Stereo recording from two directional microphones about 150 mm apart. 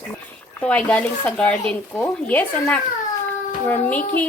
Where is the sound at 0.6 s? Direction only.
10° left (ahead or behind).